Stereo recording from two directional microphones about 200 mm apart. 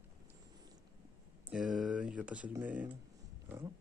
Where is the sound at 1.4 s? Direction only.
Centre (ahead or behind).